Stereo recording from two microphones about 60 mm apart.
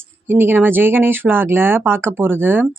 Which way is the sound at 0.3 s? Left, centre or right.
Right.